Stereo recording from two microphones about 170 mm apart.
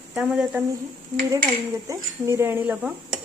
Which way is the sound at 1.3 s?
20° right (ahead or behind).